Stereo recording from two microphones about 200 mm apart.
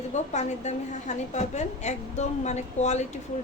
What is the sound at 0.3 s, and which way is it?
A woman's voice, 35° left (ahead or behind).